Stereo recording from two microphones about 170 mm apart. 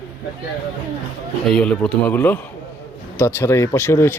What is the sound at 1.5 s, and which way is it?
Speech, 5° left (ahead or behind).